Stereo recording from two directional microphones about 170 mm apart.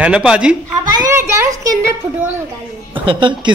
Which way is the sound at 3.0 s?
30° right (ahead or behind).